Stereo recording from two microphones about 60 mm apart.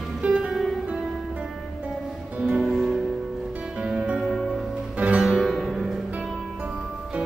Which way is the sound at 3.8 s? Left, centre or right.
Centre.